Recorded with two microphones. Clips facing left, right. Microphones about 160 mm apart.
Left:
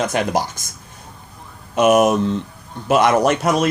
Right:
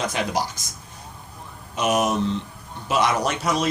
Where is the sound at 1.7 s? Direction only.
55° left (ahead or behind).